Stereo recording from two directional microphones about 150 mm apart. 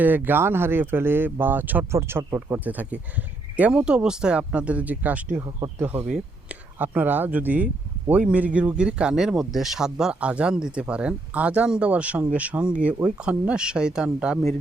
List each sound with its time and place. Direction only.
0.0 s speech: 10° right (ahead or behind)
5.4 s speech: 25° right (ahead or behind)
5.8 s speech: 10° right (ahead or behind)